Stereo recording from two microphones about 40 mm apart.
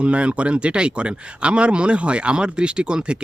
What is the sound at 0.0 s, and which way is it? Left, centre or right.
Speech, right.